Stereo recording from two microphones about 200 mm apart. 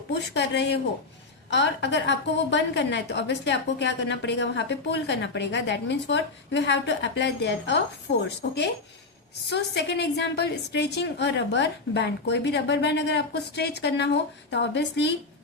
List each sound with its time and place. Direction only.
0.1 s a woman's voice: 60° left (ahead or behind)